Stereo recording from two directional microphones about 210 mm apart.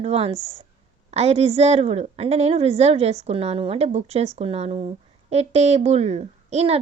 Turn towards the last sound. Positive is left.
turn(degrees=-30)  # may be behind; listen again after turning